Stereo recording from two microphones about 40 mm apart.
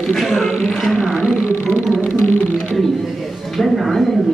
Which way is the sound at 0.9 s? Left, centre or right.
Right.